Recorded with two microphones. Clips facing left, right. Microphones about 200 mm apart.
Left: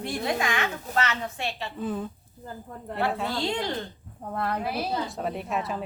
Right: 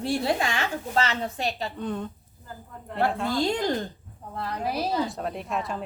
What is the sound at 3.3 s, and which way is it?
Speech, 45° right (ahead or behind).